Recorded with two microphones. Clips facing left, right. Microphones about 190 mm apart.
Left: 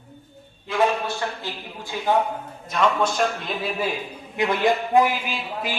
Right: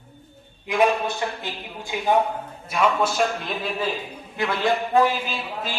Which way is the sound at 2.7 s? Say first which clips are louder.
Even; 5° right (ahead or behind).